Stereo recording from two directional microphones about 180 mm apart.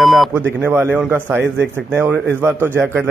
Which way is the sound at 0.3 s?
10° right (ahead or behind).